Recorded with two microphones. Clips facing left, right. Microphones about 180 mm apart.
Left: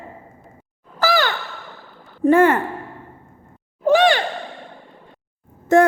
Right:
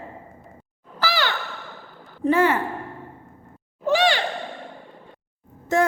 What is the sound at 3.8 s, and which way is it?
Sigh, 50° left (ahead or behind).